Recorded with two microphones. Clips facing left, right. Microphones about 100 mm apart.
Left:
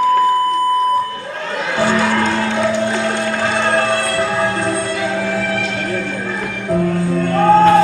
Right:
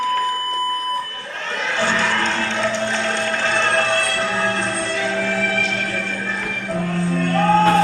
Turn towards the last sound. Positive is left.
turn(degrees=15)  # may be behind; listen again after turning